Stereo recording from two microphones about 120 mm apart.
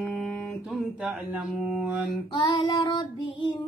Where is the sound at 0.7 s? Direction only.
5° right (ahead or behind).